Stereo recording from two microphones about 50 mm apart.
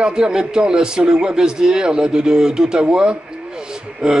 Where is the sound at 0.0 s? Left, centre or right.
Centre.